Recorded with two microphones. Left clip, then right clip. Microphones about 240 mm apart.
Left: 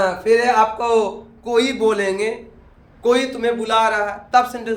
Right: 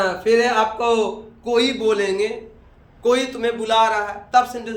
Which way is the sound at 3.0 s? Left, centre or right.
Centre.